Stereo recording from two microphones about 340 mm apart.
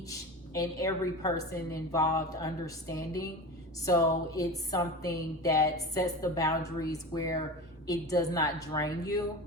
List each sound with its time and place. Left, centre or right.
0.1 s speech: centre